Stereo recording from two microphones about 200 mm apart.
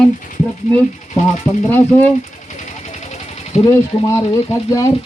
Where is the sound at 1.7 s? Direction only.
10° left (ahead or behind).